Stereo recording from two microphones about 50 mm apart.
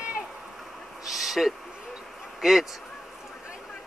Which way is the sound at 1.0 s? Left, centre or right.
Centre.